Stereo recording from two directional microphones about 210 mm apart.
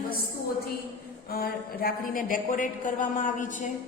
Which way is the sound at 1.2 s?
45° left (ahead or behind).